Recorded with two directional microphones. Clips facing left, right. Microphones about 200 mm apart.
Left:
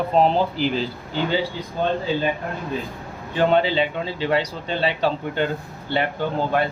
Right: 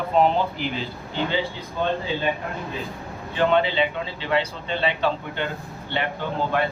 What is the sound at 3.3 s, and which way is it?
Speech, 40° left (ahead or behind).